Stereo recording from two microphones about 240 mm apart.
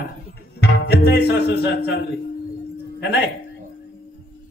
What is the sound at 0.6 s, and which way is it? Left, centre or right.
Music, left.